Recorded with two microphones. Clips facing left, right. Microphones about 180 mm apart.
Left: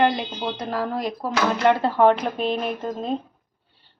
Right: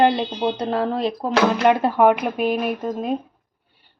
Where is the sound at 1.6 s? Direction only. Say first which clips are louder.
Left 1 dB; 10° right (ahead or behind).